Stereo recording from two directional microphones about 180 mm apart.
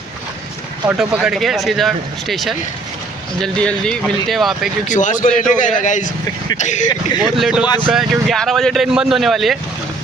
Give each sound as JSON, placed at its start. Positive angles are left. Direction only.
{"t": 0.9, "sound": "speech", "side_deg": -5}
{"t": 4.9, "sound": "a man's voice", "side_deg": 45}
{"t": 7.2, "sound": "speech", "side_deg": 0}